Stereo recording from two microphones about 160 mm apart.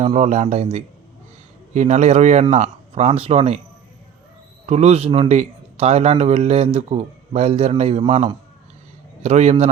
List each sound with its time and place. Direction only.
0.0 s a man's voice: 40° right (ahead or behind)
4.6 s a man's voice: 40° right (ahead or behind)